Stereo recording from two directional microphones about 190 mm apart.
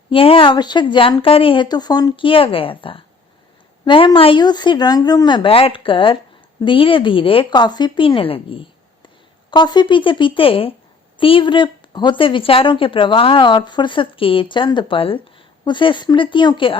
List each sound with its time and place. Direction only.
0.1 s a woman's voice: 30° left (ahead or behind)